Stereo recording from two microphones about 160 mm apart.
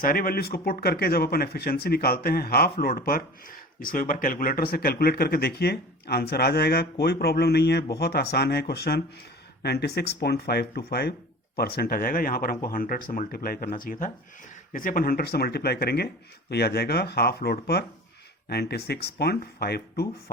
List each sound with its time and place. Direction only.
0.0 s speech: 65° left (ahead or behind); by 20.1 s 80° left